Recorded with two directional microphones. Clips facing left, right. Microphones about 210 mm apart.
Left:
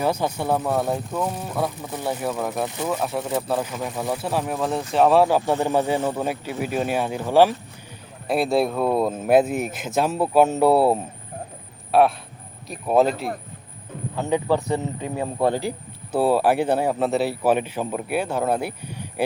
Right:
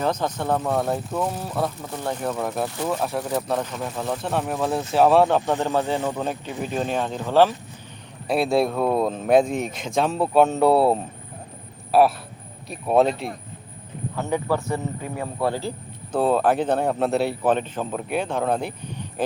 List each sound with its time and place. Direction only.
0.0 s speech: 10° left (ahead or behind)
8.3 s speech: centre (ahead or behind)
14.2 s a man's voice: 15° left (ahead or behind)
16.1 s speech: 5° left (ahead or behind)